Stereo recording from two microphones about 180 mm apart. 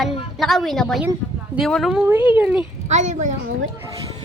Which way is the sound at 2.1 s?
10° right (ahead or behind).